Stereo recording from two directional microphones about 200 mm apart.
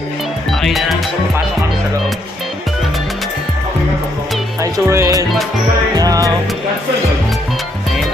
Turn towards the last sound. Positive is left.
turn(degrees=-20)  # may be behind; listen again after turning